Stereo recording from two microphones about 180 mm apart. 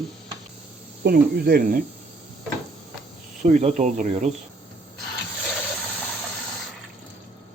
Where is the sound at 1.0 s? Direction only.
60° right (ahead or behind).